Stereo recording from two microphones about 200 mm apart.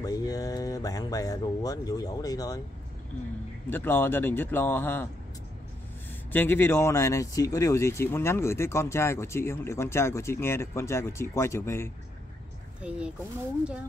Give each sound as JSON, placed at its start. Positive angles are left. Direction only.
{"t": 0.0, "sound": "speech", "side_deg": 20}
{"t": 3.7, "sound": "speech", "side_deg": 10}
{"t": 6.3, "sound": "speech", "side_deg": 10}
{"t": 12.8, "sound": "speech", "side_deg": -5}